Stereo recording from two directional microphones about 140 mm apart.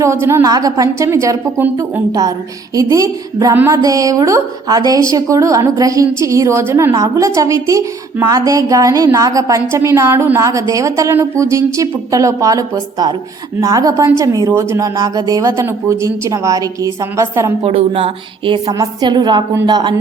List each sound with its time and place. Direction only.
0.0 s a woman's voice: 20° right (ahead or behind)
17.6 s a woman's voice: 40° right (ahead or behind)